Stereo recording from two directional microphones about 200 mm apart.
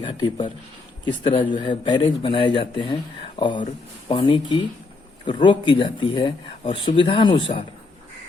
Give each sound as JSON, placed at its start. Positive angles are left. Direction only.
{"t": 0.1, "sound": "speech", "side_deg": 25}